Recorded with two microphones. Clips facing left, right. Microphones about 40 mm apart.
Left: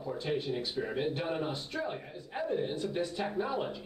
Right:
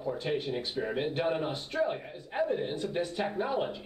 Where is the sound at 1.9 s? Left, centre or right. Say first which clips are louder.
Right 4 dB; centre.